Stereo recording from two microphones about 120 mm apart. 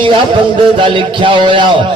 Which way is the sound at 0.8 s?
40° right (ahead or behind).